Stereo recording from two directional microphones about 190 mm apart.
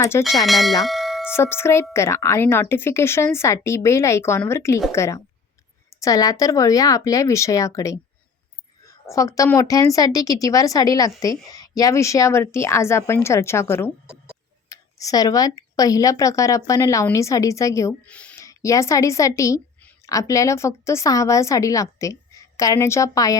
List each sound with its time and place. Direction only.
0.0 s a woman's voice: 15° left (ahead or behind)
0.4 s bell: centre (ahead or behind)
0.9 s tubular bells: centre (ahead or behind)
1.3 s a woman's voice: 10° left (ahead or behind)